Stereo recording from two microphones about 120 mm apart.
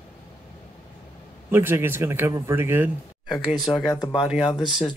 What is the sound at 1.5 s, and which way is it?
Speech, 20° right (ahead or behind).